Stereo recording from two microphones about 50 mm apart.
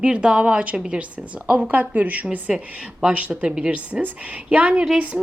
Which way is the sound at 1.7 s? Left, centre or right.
Right.